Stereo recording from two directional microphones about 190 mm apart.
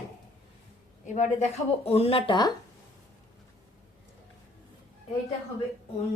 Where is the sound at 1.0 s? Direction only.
40° left (ahead or behind); by 2.5 s 20° left (ahead or behind).